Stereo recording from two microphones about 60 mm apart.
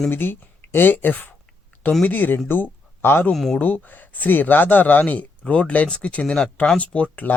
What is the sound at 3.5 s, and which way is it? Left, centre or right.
Speech, left.